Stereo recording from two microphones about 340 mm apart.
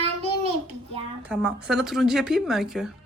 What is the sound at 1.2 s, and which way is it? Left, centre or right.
A woman's voice, centre.